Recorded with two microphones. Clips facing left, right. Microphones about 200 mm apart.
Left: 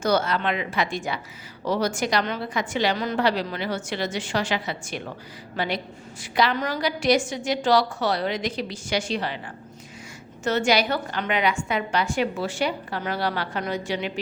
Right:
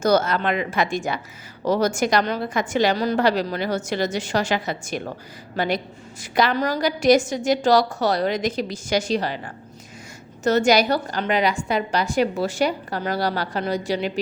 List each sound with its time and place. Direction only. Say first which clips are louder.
0.0 s a woman's voice: right 4 dB; 40° right (ahead or behind)
10.4 s a woman's voice: right 4 dB; 40° right (ahead or behind)